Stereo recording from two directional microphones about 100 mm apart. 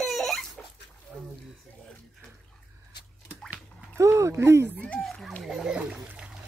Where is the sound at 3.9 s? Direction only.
30° right (ahead or behind).